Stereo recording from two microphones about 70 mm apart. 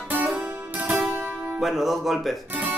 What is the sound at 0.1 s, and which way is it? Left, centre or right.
Music, right.